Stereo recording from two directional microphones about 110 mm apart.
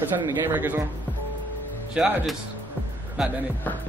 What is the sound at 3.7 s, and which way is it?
Music, 15° left (ahead or behind).